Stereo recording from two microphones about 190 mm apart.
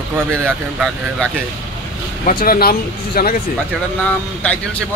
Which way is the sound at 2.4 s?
50° left (ahead or behind).